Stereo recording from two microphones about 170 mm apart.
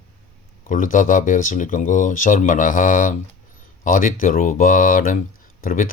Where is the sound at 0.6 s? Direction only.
50° left (ahead or behind).